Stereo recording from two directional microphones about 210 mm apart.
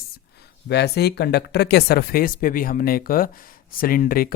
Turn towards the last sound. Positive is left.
turn(degrees=45)  # may be behind; listen again after turning